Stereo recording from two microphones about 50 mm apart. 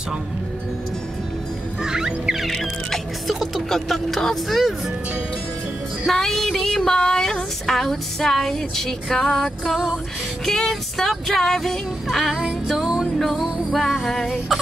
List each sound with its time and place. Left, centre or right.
1.8 s music: centre
2.4 s music: centre
6.1 s music: centre
9.4 s music: centre